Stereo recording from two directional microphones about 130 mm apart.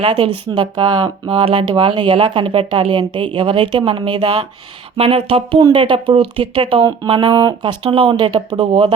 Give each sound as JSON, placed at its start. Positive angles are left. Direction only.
{"t": 0.1, "sound": "speech", "side_deg": -35}
{"t": 4.9, "sound": "speech", "side_deg": -50}
{"t": 7.1, "sound": "speech", "side_deg": -35}
{"t": 7.9, "sound": "speech", "side_deg": -45}
{"t": 8.1, "sound": "speech", "side_deg": -30}